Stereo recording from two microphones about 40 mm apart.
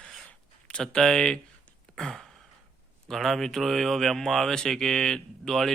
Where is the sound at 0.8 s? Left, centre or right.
Centre.